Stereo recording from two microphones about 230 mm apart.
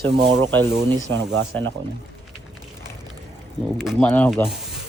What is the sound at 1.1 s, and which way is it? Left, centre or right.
Speech, right.